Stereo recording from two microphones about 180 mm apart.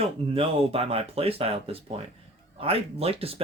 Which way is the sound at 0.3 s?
35° right (ahead or behind).